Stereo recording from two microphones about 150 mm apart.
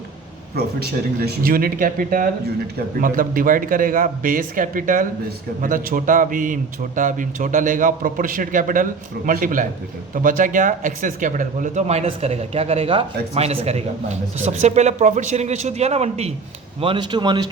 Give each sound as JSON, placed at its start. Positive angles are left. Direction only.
{"t": 0.5, "sound": "a man's voice", "side_deg": -90}
{"t": 16.8, "sound": "speech", "side_deg": -35}